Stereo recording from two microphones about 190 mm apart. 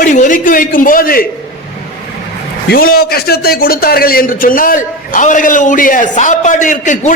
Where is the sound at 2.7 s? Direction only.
50° left (ahead or behind).